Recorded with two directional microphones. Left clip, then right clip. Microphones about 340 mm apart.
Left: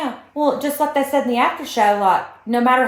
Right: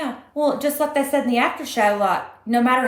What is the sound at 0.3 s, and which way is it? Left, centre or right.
A woman's voice, centre.